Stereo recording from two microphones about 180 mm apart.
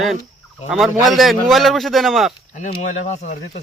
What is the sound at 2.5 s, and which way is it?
Speech, 40° left (ahead or behind).